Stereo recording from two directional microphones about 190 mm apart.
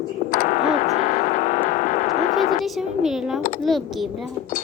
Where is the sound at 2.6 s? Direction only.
Centre (ahead or behind).